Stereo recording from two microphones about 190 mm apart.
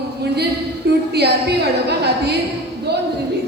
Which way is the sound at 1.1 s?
60° right (ahead or behind).